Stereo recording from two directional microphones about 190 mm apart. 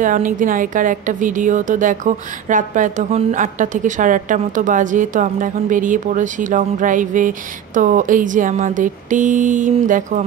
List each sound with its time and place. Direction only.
0.0 s a woman's voice: 45° right (ahead or behind)